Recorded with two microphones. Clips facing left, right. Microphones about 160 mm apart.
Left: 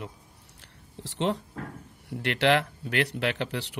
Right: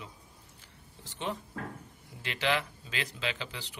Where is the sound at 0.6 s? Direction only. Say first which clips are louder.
Left 9 dB; 75° left (ahead or behind).